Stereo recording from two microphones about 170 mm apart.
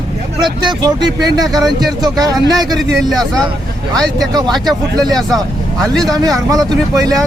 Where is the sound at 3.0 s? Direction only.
Centre (ahead or behind).